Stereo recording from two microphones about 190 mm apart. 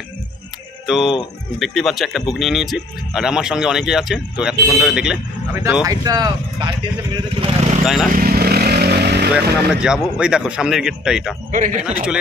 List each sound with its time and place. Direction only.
0.8 s speech: centre (ahead or behind); by 7.8 s 30° right (ahead or behind)
7.8 s speech: centre (ahead or behind)
8.1 s motorcycle: 50° right (ahead or behind)
9.8 s speech: 5° right (ahead or behind)
11.5 s a man's voice: 40° right (ahead or behind)